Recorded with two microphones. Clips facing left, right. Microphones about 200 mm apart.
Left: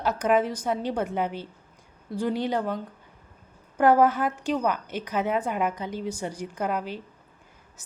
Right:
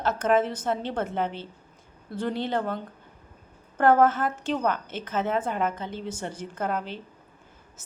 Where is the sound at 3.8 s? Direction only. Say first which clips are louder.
Even; 10° left (ahead or behind).